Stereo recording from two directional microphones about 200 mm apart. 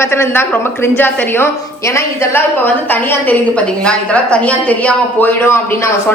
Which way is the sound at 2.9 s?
10° left (ahead or behind).